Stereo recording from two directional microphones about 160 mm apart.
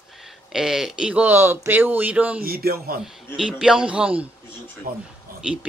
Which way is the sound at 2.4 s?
70° right (ahead or behind).